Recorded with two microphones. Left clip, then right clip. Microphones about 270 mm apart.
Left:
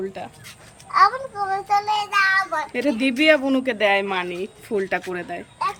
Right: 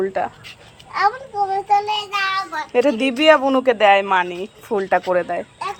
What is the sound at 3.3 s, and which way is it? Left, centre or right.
Speech, centre.